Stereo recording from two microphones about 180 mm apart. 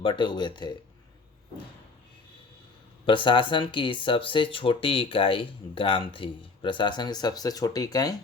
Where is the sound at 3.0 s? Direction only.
25° left (ahead or behind).